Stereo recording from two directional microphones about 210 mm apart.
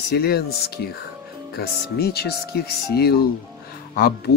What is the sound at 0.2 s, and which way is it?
Speech, 50° left (ahead or behind).